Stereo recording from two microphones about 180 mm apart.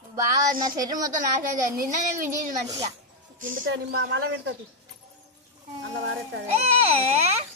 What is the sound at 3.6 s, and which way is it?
Speech, 75° right (ahead or behind).